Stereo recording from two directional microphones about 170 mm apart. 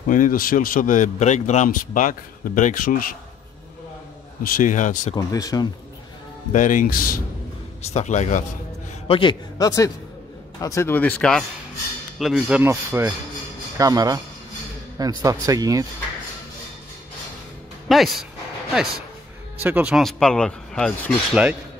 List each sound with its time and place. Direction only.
0.1 s speech: 55° left (ahead or behind)
4.4 s speech: 55° left (ahead or behind)
5.1 s a man's voice: 20° left (ahead or behind)
6.5 s speech: 50° left (ahead or behind)
7.9 s speech: 40° left (ahead or behind)
9.0 s a man's voice: 30° left (ahead or behind); by 15.9 s 20° right (ahead or behind)
17.8 s speech: centre (ahead or behind)
19.6 s speech: 10° right (ahead or behind)